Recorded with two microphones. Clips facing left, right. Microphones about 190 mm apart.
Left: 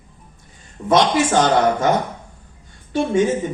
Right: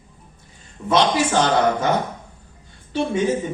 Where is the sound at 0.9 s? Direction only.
50° left (ahead or behind).